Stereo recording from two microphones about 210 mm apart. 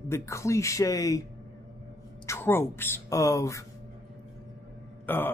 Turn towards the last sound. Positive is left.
turn(degrees=10)  # may be behind; listen again after turning